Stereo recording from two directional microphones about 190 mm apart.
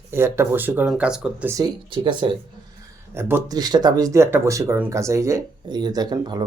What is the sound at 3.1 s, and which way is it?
Speech, 10° right (ahead or behind).